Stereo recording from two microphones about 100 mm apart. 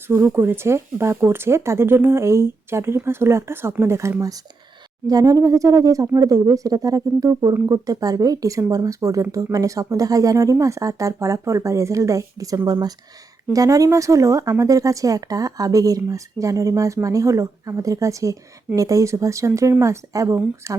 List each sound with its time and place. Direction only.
0.1 s speech: 20° right (ahead or behind)
5.0 s speech: 35° right (ahead or behind)